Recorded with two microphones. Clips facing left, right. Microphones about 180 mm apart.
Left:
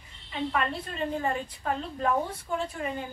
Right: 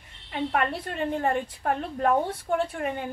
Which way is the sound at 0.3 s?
60° right (ahead or behind).